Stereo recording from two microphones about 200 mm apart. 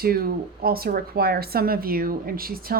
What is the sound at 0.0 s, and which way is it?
Speech, 50° right (ahead or behind).